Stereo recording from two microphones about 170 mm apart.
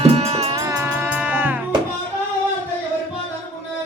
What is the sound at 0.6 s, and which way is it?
Music, 15° right (ahead or behind).